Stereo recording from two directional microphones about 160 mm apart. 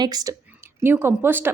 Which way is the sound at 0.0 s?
25° right (ahead or behind).